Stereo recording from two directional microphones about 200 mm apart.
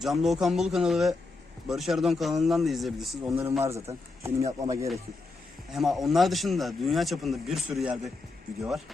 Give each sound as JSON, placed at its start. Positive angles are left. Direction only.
{"t": 0.0, "sound": "speech", "side_deg": 0}
{"t": 3.2, "sound": "speech", "side_deg": -15}
{"t": 5.7, "sound": "speech", "side_deg": 0}